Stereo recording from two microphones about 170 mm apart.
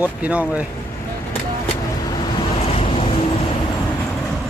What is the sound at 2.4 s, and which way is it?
Waves, 35° left (ahead or behind).